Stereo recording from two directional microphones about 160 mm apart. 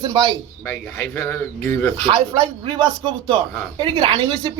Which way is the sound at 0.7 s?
10° left (ahead or behind).